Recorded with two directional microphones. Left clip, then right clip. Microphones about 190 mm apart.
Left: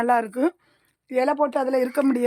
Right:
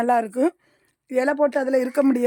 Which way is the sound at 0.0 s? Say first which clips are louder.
Right 1 dB; 10° right (ahead or behind).